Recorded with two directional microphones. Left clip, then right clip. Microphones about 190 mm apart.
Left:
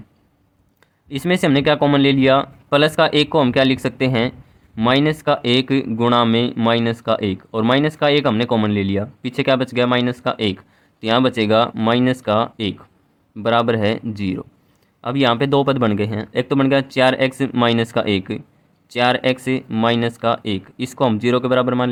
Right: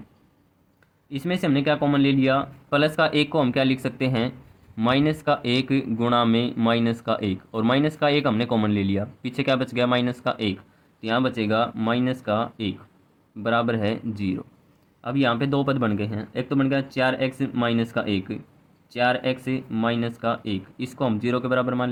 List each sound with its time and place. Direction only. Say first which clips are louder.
1.1 s speech: left 7 dB; 40° left (ahead or behind)